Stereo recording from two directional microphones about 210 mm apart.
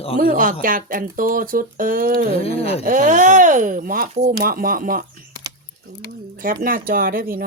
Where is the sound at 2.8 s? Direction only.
35° right (ahead or behind).